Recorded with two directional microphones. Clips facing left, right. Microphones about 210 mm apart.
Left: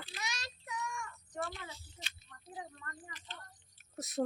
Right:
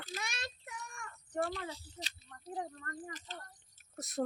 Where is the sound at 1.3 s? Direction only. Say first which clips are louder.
Right 6 dB; 35° right (ahead or behind).